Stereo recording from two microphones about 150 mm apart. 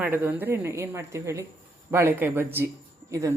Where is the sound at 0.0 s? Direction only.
10° right (ahead or behind).